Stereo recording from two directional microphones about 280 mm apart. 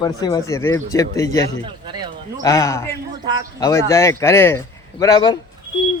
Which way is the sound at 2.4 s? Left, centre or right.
Centre.